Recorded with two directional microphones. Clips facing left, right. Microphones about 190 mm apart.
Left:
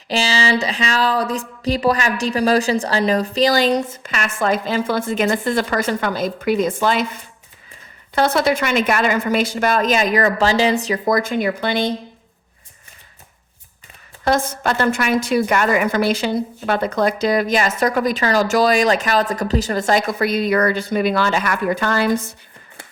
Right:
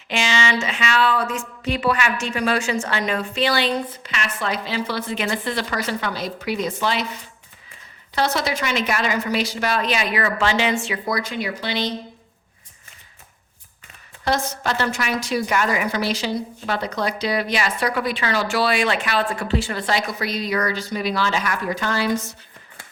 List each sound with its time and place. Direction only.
0.1 s a woman's voice: 35° left (ahead or behind); by 11.9 s 50° left (ahead or behind)
14.3 s a woman's voice: 50° left (ahead or behind)